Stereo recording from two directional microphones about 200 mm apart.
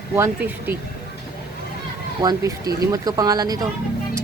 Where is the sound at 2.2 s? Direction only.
20° right (ahead or behind).